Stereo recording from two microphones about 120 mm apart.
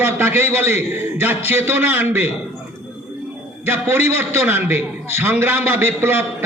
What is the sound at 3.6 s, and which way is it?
A man's voice, 20° right (ahead or behind).